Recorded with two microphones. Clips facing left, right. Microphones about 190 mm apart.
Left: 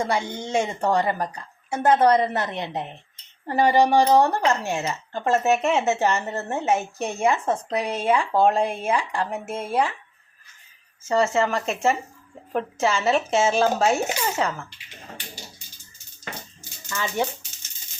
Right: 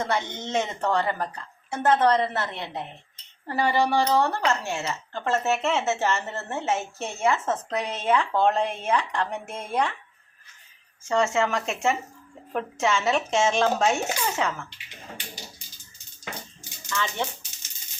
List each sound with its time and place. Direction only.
0.0 s speech: 10° left (ahead or behind)
3.4 s cutlery: 15° left (ahead or behind)
4.4 s speech: 15° left (ahead or behind)
11.1 s a woman's voice: centre (ahead or behind)
16.9 s speech: 10° left (ahead or behind)